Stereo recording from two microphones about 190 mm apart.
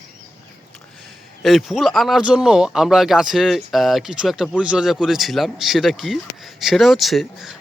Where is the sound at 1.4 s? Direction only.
Centre (ahead or behind).